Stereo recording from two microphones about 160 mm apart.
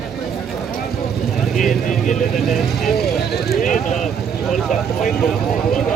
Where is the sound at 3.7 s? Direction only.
Centre (ahead or behind).